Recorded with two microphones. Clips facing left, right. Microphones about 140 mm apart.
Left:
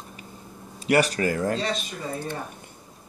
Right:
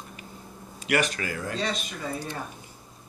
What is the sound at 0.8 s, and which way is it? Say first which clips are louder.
Speech: left 5 dB; 35° left (ahead or behind).